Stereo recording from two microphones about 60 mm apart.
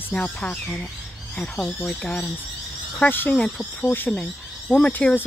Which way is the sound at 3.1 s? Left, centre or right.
Left.